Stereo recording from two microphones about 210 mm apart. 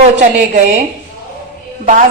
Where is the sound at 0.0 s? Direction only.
35° right (ahead or behind).